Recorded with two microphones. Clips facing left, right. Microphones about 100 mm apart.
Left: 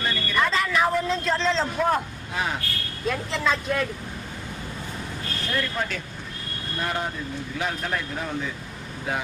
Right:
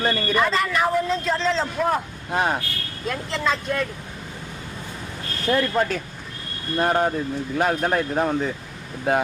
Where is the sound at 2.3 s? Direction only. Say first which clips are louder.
Right 6 dB; 50° right (ahead or behind).